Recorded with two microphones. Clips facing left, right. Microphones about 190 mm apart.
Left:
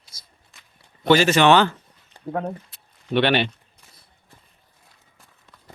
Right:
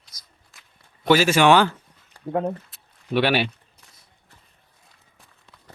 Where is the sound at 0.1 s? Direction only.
30° left (ahead or behind).